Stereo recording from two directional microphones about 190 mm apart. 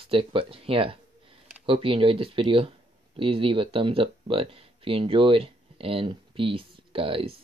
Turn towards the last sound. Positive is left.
turn(degrees=-30)  # may be behind; listen again after turning